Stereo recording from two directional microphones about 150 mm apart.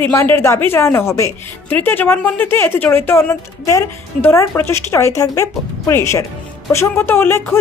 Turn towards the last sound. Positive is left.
turn(degrees=15)  # may be behind; listen again after turning